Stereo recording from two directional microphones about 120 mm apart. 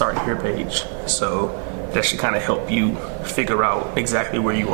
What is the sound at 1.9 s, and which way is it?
Speech, 15° right (ahead or behind).